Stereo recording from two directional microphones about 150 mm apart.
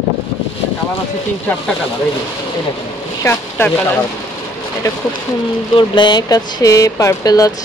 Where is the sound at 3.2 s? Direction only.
15° left (ahead or behind).